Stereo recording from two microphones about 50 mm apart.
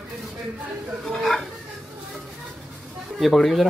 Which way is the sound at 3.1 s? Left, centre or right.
Centre.